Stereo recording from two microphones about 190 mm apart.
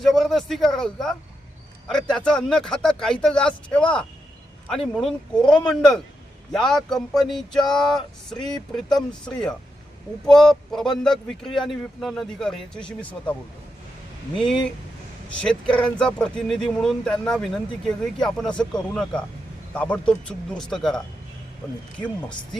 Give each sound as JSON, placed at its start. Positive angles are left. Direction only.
{"t": 0.0, "sound": "speech", "side_deg": 0}
{"t": 14.3, "sound": "speech", "side_deg": 5}
{"t": 15.7, "sound": "speech", "side_deg": 5}
{"t": 21.9, "sound": "speech", "side_deg": 5}